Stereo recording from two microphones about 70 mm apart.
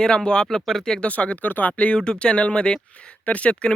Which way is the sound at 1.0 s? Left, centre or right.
Centre.